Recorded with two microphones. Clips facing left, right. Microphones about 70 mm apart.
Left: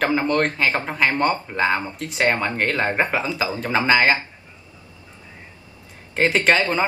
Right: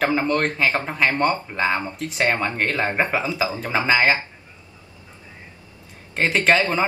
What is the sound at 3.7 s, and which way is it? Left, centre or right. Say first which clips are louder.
Speech: left 1 dB; centre.